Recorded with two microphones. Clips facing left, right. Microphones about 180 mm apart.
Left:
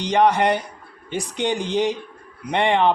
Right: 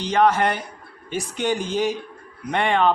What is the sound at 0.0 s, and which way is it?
A man's voice, 15° left (ahead or behind).